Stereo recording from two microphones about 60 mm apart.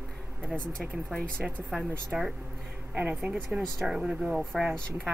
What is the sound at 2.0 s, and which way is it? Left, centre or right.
Speech, centre.